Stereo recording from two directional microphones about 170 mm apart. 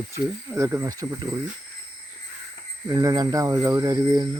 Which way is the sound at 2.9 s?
25° right (ahead or behind).